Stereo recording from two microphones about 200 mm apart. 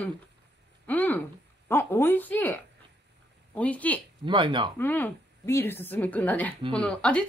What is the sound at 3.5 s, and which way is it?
Speech, 5° left (ahead or behind).